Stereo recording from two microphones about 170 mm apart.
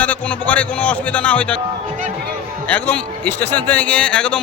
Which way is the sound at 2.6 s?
10° left (ahead or behind).